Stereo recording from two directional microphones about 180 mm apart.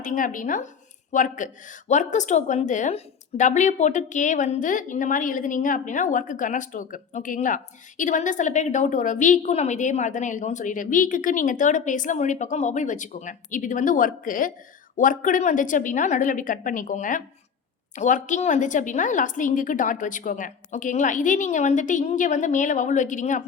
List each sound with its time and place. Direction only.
0.0 s a woman's voice: 45° left (ahead or behind)